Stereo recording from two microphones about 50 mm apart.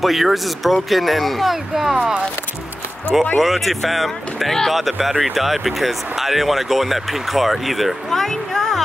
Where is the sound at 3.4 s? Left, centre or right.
Centre.